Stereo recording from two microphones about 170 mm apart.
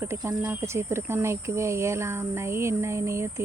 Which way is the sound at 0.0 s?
15° right (ahead or behind).